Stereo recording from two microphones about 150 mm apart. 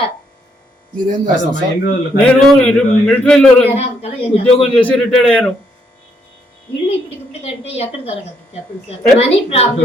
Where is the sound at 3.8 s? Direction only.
40° left (ahead or behind).